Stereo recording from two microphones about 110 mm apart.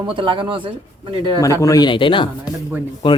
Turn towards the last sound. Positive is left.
turn(degrees=45)  # may be behind; listen again after turning